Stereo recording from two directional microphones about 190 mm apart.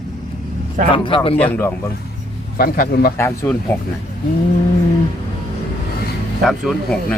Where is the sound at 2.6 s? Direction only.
50° left (ahead or behind).